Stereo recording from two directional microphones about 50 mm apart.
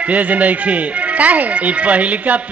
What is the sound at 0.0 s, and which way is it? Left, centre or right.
A woman's voice, right.